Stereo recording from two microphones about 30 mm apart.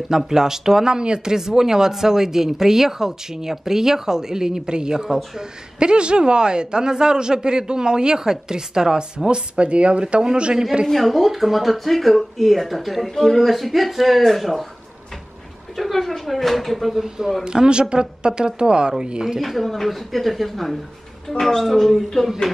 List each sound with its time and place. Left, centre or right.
0.1 s speech: centre
9.3 s speech: right
10.9 s speech: centre
13.4 s speech: centre
15.7 s speech: centre
16.9 s speech: centre
17.5 s speech: right
19.4 s speech: centre
21.3 s speech: centre